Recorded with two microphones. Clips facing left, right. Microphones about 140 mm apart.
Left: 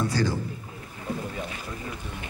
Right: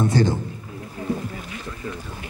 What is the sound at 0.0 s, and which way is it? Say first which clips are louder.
Speech: right 6 dB; 20° right (ahead or behind).